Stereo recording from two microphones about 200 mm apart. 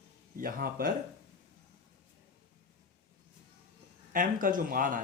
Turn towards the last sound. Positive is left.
turn(degrees=-45)  # may be behind; listen again after turning